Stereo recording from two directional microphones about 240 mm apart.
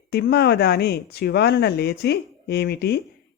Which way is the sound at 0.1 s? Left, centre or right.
Left.